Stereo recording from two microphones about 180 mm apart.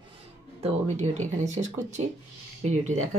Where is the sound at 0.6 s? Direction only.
40° right (ahead or behind).